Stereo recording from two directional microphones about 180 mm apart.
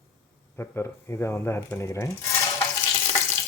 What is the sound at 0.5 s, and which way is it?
Speech, 15° left (ahead or behind).